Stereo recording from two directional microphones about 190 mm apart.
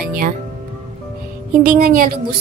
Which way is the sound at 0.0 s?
50° right (ahead or behind).